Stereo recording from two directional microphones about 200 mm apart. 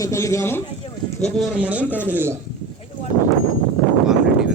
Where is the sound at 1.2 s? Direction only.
5° right (ahead or behind).